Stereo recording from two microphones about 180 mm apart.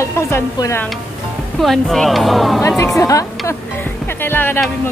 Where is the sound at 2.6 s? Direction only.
15° left (ahead or behind).